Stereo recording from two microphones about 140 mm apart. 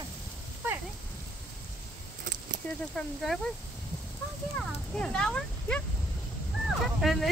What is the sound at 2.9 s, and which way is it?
Speech, centre (ahead or behind).